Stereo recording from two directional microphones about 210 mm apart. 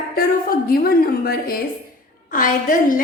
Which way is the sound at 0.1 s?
45° left (ahead or behind).